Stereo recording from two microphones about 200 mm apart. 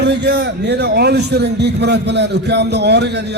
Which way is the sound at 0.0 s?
60° right (ahead or behind).